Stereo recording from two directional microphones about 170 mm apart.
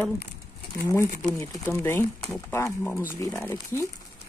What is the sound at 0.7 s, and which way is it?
Speech, 20° left (ahead or behind).